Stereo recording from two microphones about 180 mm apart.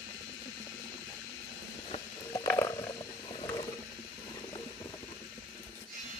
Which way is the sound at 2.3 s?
15° left (ahead or behind).